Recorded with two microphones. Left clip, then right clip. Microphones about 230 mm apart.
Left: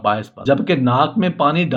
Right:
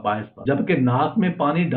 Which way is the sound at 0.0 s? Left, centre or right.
Left.